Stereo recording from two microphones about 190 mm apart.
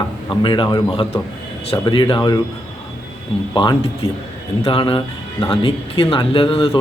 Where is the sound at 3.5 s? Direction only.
25° left (ahead or behind).